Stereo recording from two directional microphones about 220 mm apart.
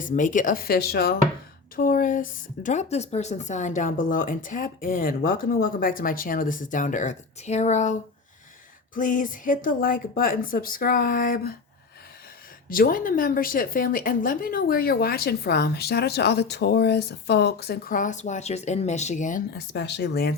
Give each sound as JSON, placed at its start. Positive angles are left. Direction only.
{"t": 0.0, "sound": "a woman's voice", "side_deg": 35}
{"t": 9.0, "sound": "a woman's voice", "side_deg": 35}
{"t": 12.6, "sound": "a woman's voice", "side_deg": 40}
{"t": 19.7, "sound": "speech", "side_deg": 50}